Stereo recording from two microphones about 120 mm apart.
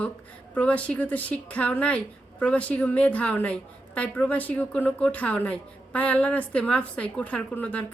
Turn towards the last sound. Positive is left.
turn(degrees=10)  # may be behind; listen again after turning